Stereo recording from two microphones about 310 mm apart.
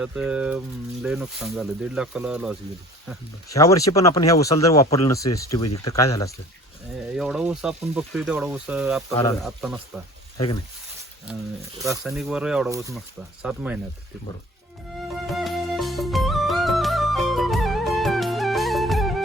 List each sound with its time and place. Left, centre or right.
0.0 s speech: centre
3.5 s speech: centre
7.2 s speech: centre
10.3 s speech: centre
11.8 s speech: centre
15.3 s music: centre